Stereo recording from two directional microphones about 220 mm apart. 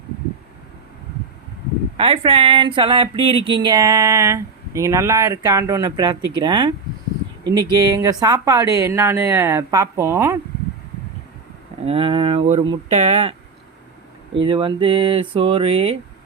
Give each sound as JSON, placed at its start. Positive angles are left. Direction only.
{"t": 2.0, "sound": "speech", "side_deg": -25}
{"t": 11.9, "sound": "speech", "side_deg": -25}
{"t": 14.4, "sound": "speech", "side_deg": -25}